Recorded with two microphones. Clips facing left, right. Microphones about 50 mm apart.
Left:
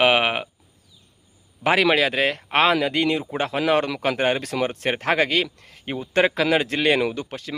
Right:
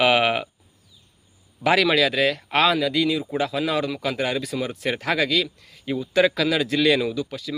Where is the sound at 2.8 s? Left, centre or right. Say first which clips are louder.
Even; left.